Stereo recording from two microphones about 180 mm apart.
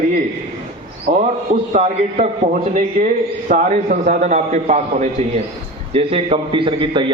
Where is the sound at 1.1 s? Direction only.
45° right (ahead or behind).